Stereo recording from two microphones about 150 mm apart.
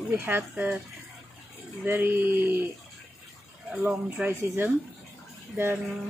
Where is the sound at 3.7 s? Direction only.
10° right (ahead or behind).